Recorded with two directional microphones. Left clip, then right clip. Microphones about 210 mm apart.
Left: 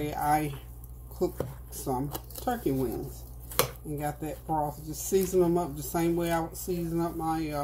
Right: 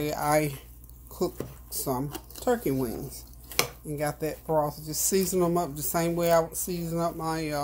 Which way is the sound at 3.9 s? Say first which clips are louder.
Right 5 dB; 50° right (ahead or behind).